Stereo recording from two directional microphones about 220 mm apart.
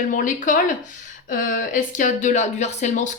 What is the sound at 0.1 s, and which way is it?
Speech, 35° left (ahead or behind).